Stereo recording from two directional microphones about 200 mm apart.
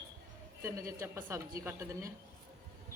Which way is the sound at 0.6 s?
15° right (ahead or behind).